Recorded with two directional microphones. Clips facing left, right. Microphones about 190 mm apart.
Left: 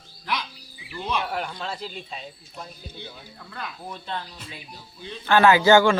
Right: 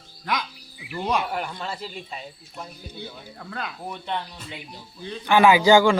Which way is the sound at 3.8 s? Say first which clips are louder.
Right 3 dB; 15° right (ahead or behind).